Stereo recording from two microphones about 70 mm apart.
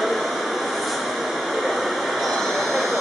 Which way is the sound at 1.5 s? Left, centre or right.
Centre.